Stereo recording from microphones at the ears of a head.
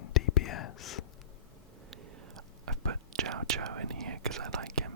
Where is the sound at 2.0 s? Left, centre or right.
Right.